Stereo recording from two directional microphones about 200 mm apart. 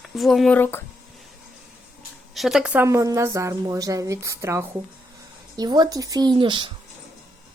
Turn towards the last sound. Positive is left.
turn(degrees=-25)  # may be behind; listen again after turning